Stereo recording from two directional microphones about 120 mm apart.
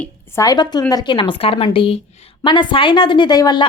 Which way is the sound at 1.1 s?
45° left (ahead or behind).